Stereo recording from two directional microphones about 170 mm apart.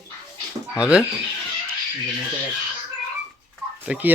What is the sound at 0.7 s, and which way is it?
Speech, 5° right (ahead or behind).